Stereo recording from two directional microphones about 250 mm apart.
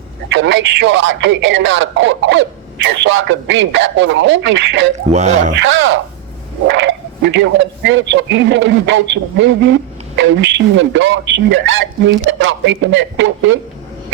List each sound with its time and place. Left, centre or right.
0.3 s a man's voice: right